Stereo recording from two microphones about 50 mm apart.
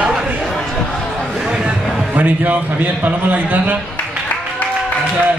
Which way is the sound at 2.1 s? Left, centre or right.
Right.